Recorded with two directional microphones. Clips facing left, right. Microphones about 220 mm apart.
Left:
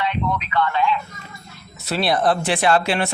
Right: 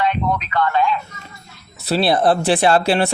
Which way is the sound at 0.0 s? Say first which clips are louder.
Right 3 dB; 45° right (ahead or behind).